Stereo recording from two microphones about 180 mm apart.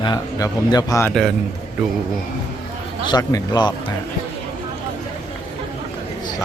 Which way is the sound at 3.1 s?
20° left (ahead or behind).